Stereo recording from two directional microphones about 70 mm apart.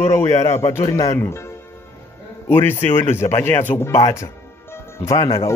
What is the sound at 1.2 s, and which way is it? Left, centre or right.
Speech, left.